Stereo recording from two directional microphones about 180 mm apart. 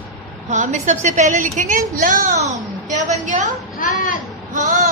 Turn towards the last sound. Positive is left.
turn(degrees=-45)  # may be behind; listen again after turning